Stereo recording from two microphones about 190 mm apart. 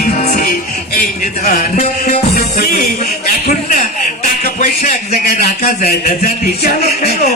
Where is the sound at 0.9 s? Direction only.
50° left (ahead or behind).